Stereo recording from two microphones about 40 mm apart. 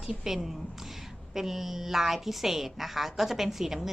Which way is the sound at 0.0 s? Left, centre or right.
Centre.